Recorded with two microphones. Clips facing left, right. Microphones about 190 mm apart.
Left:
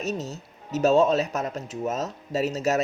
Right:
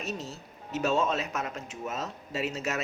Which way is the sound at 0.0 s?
40° left (ahead or behind).